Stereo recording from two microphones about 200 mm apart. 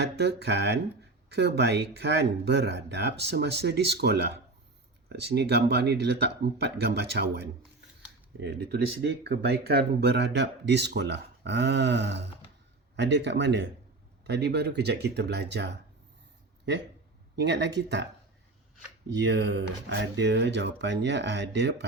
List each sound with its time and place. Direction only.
0.0 s speech: 55° right (ahead or behind)
17.3 s speech: 60° right (ahead or behind)
19.1 s speech: 60° right (ahead or behind)